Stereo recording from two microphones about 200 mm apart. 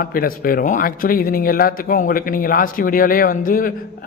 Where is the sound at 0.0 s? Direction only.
45° left (ahead or behind).